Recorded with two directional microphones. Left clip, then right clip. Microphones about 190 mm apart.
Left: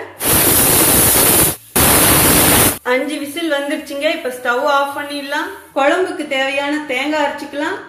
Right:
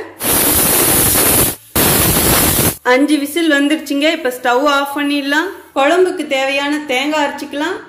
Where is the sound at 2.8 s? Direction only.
60° right (ahead or behind).